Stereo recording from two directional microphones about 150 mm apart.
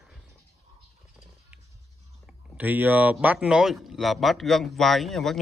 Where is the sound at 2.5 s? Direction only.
10° right (ahead or behind).